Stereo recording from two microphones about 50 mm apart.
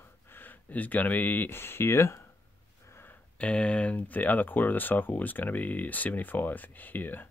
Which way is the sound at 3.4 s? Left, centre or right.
Left.